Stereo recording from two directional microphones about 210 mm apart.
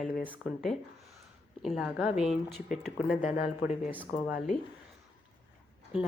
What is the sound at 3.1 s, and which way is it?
Speech, 35° left (ahead or behind).